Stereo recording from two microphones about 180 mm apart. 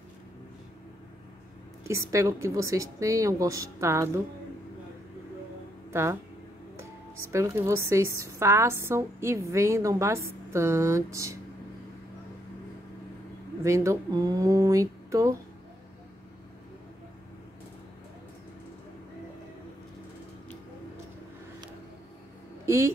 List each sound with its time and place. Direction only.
1.9 s a woman's voice: 15° right (ahead or behind)
7.3 s a woman's voice: 15° right (ahead or behind)
13.6 s speech: 15° right (ahead or behind)